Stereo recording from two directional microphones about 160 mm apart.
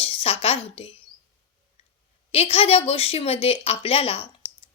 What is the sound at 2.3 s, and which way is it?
Speech, 40° left (ahead or behind).